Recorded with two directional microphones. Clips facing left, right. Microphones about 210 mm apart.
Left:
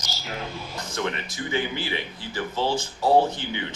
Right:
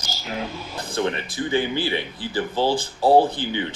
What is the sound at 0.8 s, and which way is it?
Speech, 30° right (ahead or behind).